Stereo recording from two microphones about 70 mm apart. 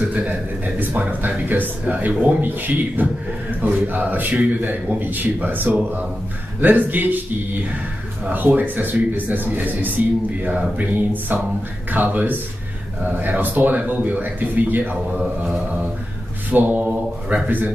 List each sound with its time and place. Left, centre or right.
0.0 s a man's voice: right
8.3 s a man's voice: right